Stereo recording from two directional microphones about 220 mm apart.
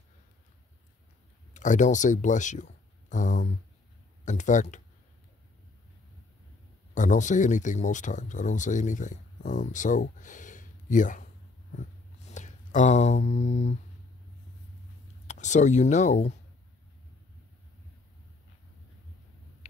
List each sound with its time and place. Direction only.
1.5 s speech: 35° left (ahead or behind)
6.9 s speech: 35° left (ahead or behind)
11.7 s a sound: 35° left (ahead or behind)
15.2 s speech: 35° left (ahead or behind)